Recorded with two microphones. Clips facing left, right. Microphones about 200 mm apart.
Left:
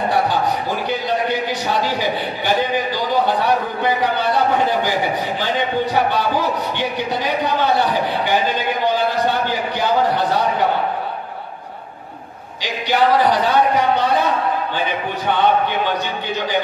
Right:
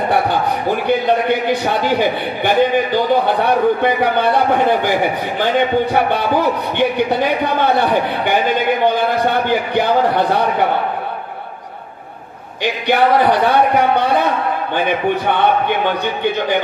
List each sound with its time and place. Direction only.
0.8 s a man's voice: 60° right (ahead or behind)
5.9 s a man's voice: 55° right (ahead or behind)
12.6 s a man's voice: 55° right (ahead or behind)